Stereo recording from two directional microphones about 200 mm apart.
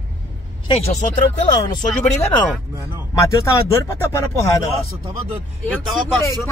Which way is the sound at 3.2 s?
15° left (ahead or behind).